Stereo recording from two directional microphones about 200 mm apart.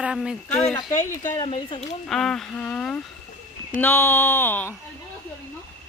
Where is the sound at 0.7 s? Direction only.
15° left (ahead or behind).